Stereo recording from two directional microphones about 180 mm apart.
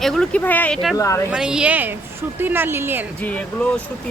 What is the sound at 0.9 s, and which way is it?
Speech, 15° left (ahead or behind).